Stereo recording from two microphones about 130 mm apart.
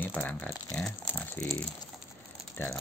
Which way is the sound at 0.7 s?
5° left (ahead or behind).